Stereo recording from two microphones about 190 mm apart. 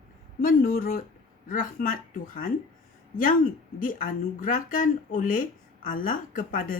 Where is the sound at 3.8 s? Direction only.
45° left (ahead or behind).